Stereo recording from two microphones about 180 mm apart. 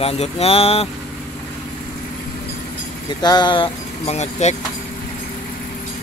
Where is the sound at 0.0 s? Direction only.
35° left (ahead or behind).